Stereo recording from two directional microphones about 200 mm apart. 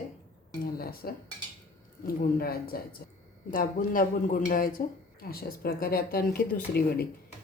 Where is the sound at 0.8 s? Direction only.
50° left (ahead or behind).